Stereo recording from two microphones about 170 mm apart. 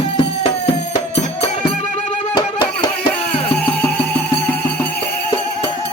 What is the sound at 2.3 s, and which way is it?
Music, 25° left (ahead or behind).